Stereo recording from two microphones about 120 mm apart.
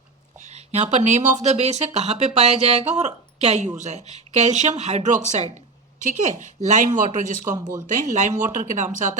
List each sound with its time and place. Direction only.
0.3 s speech: 70° right (ahead or behind)
6.0 s a woman's voice: 90° right
7.6 s speech: 35° right (ahead or behind)
7.9 s a woman's voice: 90° right